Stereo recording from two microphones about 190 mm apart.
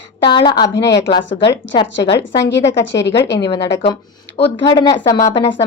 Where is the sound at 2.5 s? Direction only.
70° left (ahead or behind).